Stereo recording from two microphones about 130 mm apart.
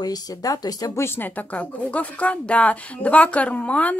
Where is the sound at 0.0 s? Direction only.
30° left (ahead or behind).